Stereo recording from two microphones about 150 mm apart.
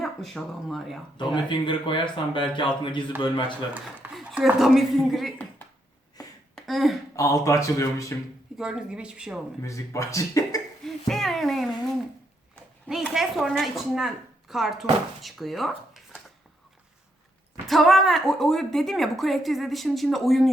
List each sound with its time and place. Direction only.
0.0 s speech: centre (ahead or behind)
1.1 s speech: 30° left (ahead or behind)
4.1 s speech: centre (ahead or behind)
6.6 s speech: centre (ahead or behind)
7.2 s speech: 20° left (ahead or behind)
8.5 s a woman's voice: 5° right (ahead or behind)
9.6 s speech: 20° left (ahead or behind)
10.8 s a sound: centre (ahead or behind)
13.0 s speech: centre (ahead or behind)
17.7 s a woman's voice: centre (ahead or behind)